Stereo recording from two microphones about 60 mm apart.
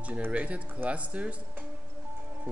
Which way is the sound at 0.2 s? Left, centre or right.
Right.